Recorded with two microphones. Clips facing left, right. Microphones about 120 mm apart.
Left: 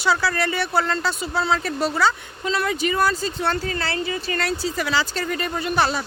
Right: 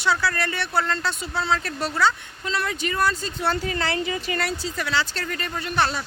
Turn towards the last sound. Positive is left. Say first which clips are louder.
# left 3 dB
turn(degrees=5)  # may be behind; listen again after turning